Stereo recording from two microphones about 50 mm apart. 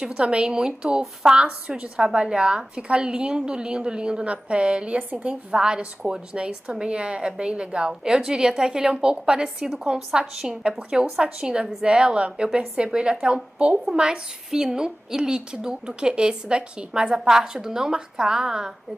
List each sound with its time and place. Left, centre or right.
0.1 s a woman's voice: right